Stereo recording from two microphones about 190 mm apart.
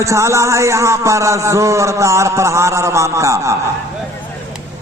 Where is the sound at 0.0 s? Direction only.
15° right (ahead or behind).